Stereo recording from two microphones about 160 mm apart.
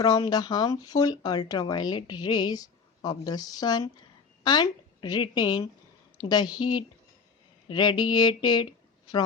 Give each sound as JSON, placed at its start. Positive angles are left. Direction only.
{"t": 0.0, "sound": "speech", "side_deg": 25}